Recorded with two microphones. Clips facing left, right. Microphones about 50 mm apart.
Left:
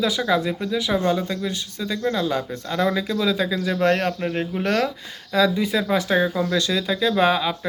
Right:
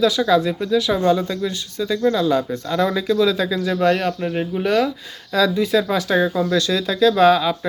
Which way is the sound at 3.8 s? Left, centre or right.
Left.